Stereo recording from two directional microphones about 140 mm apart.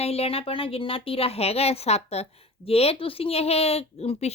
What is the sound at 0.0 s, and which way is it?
A woman's voice, 45° left (ahead or behind).